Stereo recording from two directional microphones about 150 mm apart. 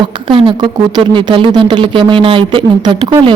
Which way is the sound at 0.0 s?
35° right (ahead or behind).